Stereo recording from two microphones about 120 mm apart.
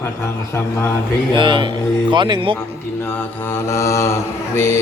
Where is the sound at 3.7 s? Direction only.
25° left (ahead or behind).